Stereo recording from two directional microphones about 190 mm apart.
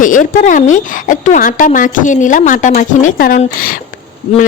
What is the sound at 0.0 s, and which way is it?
A woman's voice, 40° left (ahead or behind).